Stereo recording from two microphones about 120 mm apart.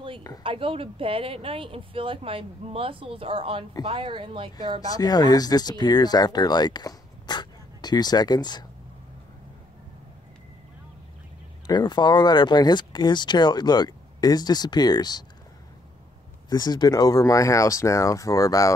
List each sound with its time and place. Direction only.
0.4 s speech: 50° right (ahead or behind)
4.8 s speech: 30° left (ahead or behind)
11.6 s speech: 35° left (ahead or behind)
16.4 s speech: 35° left (ahead or behind)